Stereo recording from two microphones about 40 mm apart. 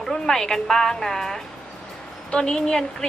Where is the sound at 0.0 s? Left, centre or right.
Centre.